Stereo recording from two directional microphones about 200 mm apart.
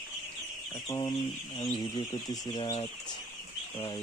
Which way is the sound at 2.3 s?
20° left (ahead or behind).